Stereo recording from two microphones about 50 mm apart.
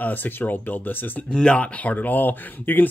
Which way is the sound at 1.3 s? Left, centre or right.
Left.